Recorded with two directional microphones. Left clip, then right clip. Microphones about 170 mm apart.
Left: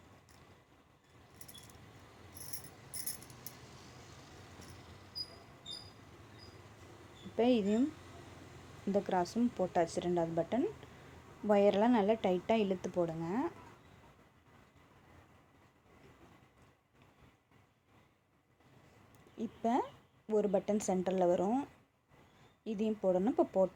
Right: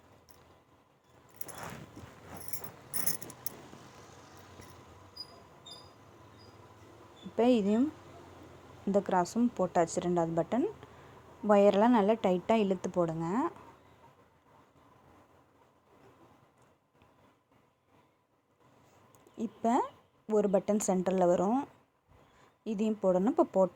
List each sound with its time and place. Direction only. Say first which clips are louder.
7.3 s a woman's voice: right 4 dB; 20° right (ahead or behind)
8.9 s a woman's voice: right 5 dB; 25° right (ahead or behind)
19.4 s a woman's voice: right 4 dB; 30° right (ahead or behind)